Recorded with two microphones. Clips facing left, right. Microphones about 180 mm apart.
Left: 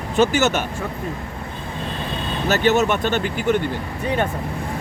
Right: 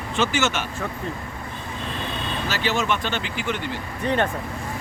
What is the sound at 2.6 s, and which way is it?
Speech, 45° left (ahead or behind).